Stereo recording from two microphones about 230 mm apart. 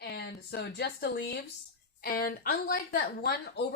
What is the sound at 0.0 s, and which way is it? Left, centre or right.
Speech, left.